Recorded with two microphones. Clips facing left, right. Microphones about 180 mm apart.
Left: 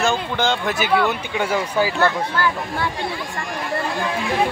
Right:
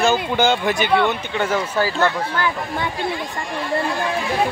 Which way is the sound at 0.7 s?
5° left (ahead or behind).